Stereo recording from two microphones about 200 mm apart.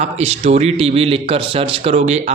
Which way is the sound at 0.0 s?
30° right (ahead or behind).